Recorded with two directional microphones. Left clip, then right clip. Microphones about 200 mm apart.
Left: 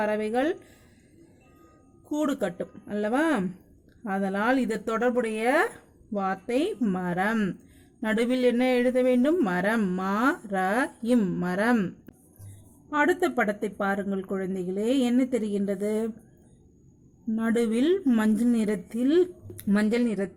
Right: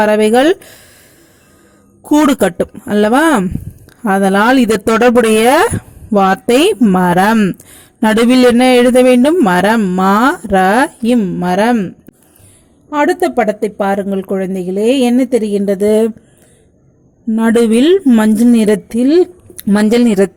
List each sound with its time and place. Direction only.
0.0 s speech: 45° right (ahead or behind)
2.0 s speech: 45° right (ahead or behind)
12.9 s a woman's voice: 30° right (ahead or behind)
17.3 s a woman's voice: 40° right (ahead or behind)